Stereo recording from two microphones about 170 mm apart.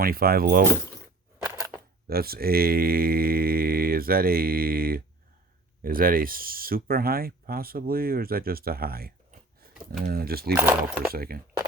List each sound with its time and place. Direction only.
0.0 s speech: 60° right (ahead or behind)
2.0 s speech: 65° right (ahead or behind)
10.5 s speech: 10° right (ahead or behind)
11.1 s speech: 65° right (ahead or behind)